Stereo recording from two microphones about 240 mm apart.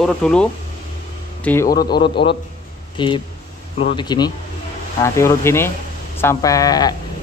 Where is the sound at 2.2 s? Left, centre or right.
Left.